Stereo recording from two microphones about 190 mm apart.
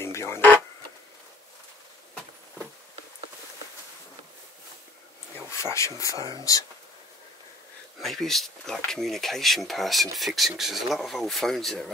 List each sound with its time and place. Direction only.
0.0 s a sound: 15° left (ahead or behind)
5.5 s speech: 15° left (ahead or behind)
8.0 s speech: centre (ahead or behind)